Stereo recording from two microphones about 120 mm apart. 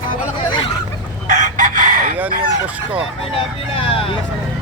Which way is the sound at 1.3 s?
90° right.